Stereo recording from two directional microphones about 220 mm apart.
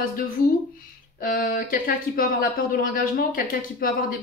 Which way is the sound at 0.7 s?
40° left (ahead or behind).